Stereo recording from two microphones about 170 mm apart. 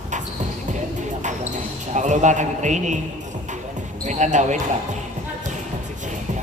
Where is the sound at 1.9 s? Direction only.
45° right (ahead or behind).